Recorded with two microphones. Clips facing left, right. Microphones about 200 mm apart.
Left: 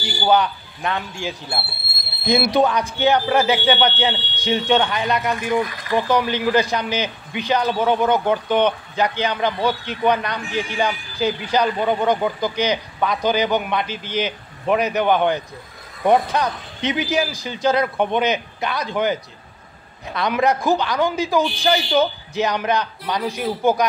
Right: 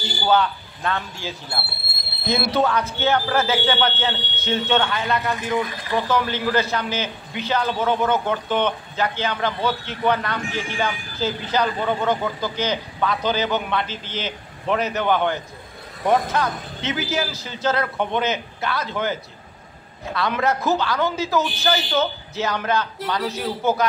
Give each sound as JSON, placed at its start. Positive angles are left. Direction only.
{"t": 0.0, "sound": "a man's voice", "side_deg": 15}
{"t": 20.2, "sound": "a man's voice", "side_deg": 15}